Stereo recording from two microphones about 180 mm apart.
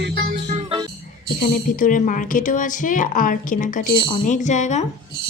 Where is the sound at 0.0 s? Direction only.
65° right (ahead or behind).